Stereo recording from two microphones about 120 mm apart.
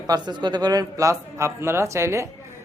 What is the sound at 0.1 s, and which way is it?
Speech, 35° right (ahead or behind).